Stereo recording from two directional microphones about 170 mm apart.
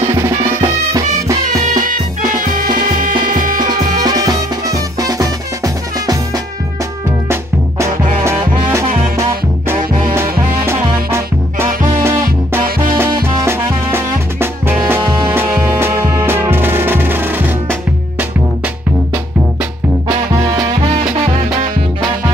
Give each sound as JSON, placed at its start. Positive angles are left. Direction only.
{"t": 0.0, "sound": "music", "side_deg": -15}
{"t": 1.4, "sound": "music", "side_deg": -50}
{"t": 4.0, "sound": "music", "side_deg": -25}
{"t": 8.2, "sound": "music", "side_deg": -15}
{"t": 10.1, "sound": "music", "side_deg": -15}
{"t": 20.8, "sound": "music", "side_deg": -40}